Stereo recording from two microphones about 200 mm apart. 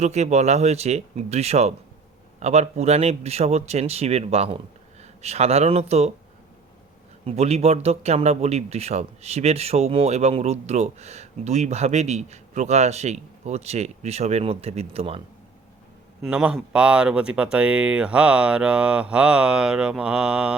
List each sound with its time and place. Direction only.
0.0 s a man's voice: 35° right (ahead or behind)
7.3 s a man's voice: 30° right (ahead or behind)
16.2 s speech: 5° right (ahead or behind)